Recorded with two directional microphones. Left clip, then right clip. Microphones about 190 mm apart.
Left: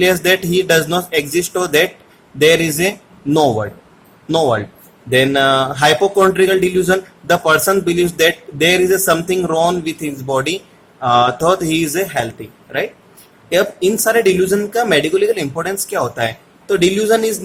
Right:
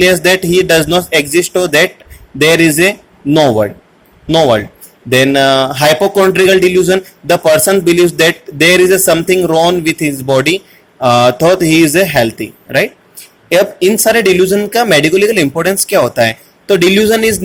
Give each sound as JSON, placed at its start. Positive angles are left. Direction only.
{"t": 0.0, "sound": "speech", "side_deg": -20}
{"t": 2.4, "sound": "speech", "side_deg": -20}
{"t": 3.2, "sound": "speech", "side_deg": -10}